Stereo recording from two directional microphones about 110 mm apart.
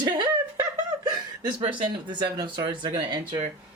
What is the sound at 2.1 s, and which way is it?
Speech, 40° right (ahead or behind).